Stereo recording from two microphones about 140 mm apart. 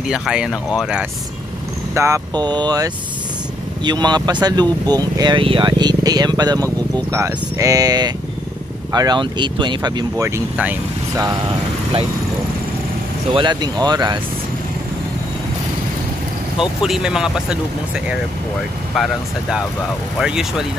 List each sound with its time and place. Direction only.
0.0 s speech: 5° right (ahead or behind)
2.0 s speech: 20° right (ahead or behind)
13.3 s speech: 35° right (ahead or behind)
16.5 s speech: 5° right (ahead or behind)